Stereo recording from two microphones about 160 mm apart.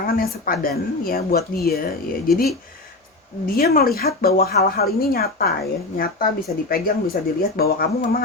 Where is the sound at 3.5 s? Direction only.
65° left (ahead or behind).